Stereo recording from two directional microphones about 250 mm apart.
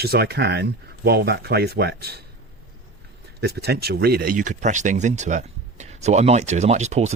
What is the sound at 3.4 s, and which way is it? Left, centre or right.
Speech, right.